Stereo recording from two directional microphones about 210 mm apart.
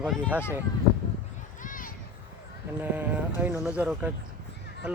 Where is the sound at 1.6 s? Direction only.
40° left (ahead or behind).